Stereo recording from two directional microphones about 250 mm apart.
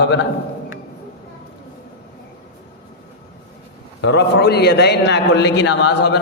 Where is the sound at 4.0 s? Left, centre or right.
Left.